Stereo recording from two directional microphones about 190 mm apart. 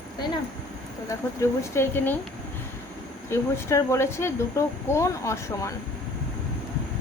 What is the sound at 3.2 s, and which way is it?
Speech, 15° left (ahead or behind).